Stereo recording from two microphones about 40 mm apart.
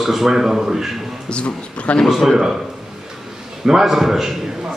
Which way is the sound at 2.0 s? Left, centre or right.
Centre.